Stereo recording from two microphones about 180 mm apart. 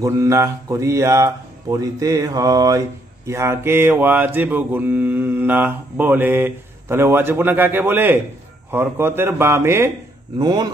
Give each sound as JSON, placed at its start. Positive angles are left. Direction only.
{"t": 0.0, "sound": "mantra", "side_deg": -15}
{"t": 10.4, "sound": "speech", "side_deg": -20}